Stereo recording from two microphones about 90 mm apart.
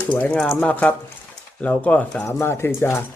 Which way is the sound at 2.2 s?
30° left (ahead or behind).